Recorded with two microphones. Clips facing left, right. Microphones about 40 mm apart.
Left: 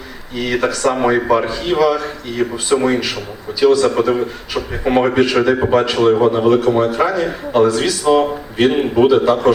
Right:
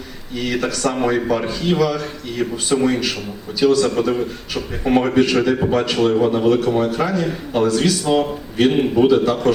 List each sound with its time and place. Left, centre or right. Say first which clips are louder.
0.5 s speech: left 5 dB; left
4.9 s speech: left 2 dB; left
5.2 s speech: left 3 dB; centre
7.5 s speech: left 3 dB; centre
8.1 s a man's voice: left 4 dB; left
9.0 s speech: left 3 dB; left